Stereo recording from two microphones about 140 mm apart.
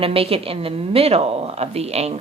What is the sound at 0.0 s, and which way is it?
A woman's voice, 45° right (ahead or behind).